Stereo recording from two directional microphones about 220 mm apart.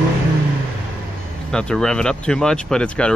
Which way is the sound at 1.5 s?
5° left (ahead or behind).